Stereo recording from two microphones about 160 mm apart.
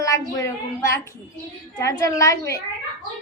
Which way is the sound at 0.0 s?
20° left (ahead or behind).